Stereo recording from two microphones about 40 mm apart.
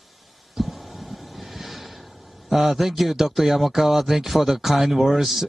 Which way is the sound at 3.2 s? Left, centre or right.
Centre.